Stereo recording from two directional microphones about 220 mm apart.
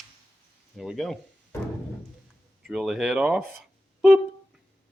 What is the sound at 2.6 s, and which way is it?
Speech, centre (ahead or behind).